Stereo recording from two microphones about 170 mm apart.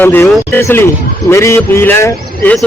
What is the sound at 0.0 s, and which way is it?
Speech, 10° left (ahead or behind).